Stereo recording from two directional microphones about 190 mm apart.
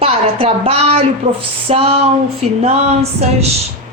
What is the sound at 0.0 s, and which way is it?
A woman's voice, 30° right (ahead or behind).